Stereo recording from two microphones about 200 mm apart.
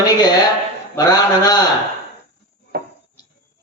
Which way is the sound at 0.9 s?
20° left (ahead or behind).